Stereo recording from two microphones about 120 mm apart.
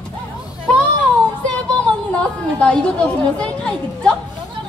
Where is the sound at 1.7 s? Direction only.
10° left (ahead or behind).